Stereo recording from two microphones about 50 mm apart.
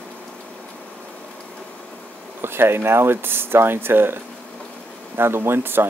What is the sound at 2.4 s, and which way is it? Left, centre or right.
Speech, right.